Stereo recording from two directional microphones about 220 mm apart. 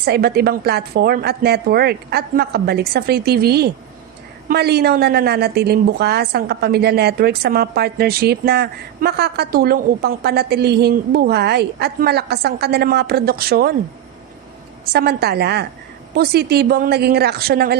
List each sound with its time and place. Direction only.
0.0 s a woman's voice: 45° right (ahead or behind)
14.9 s a woman's voice: 45° right (ahead or behind)